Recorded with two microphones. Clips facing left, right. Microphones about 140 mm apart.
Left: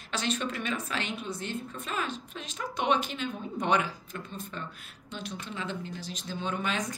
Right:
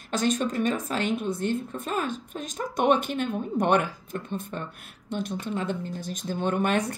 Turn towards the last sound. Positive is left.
turn(degrees=-60)  # may be behind; listen again after turning